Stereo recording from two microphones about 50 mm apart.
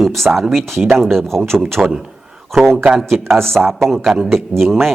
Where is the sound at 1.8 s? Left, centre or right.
Centre.